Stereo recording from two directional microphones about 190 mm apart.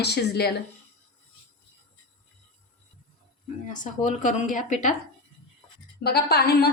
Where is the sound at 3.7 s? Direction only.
40° left (ahead or behind).